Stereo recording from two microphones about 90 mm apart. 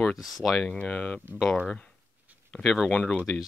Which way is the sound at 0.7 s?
15° left (ahead or behind).